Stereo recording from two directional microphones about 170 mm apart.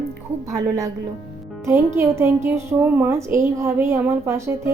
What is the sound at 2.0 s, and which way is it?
A woman's voice, 15° right (ahead or behind).